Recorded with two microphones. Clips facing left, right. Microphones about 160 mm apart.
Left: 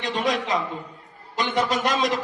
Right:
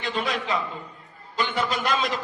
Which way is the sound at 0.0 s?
40° left (ahead or behind).